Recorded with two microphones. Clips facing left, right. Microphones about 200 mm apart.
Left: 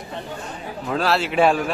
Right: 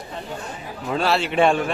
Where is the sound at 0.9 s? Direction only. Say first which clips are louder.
Even; centre (ahead or behind).